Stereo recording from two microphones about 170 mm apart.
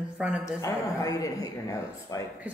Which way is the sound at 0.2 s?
5° right (ahead or behind).